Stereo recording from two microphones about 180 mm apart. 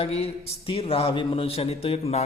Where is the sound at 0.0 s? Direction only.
35° left (ahead or behind).